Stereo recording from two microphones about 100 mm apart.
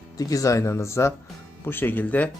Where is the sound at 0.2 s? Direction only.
35° left (ahead or behind).